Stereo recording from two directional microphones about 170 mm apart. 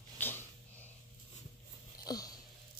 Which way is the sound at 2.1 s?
20° left (ahead or behind).